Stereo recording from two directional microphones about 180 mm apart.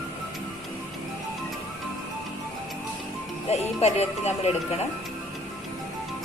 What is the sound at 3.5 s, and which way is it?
Speech, 35° left (ahead or behind).